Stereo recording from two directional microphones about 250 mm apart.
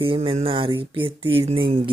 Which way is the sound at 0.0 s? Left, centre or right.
Right.